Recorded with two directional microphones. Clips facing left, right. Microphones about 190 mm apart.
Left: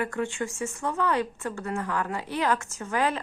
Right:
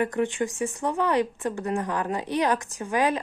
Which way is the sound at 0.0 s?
20° right (ahead or behind).